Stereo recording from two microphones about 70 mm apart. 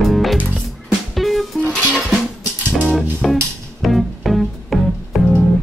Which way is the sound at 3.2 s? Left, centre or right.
Centre.